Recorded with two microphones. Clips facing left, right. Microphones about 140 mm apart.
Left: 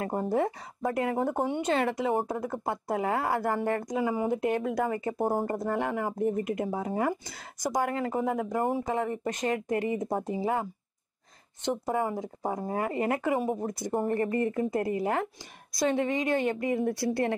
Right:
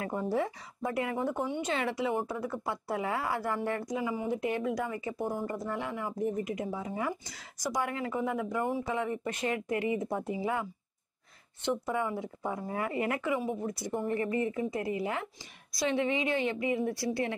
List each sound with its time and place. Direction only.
0.0 s speech: 40° left (ahead or behind)
1.4 s speech: 55° left (ahead or behind)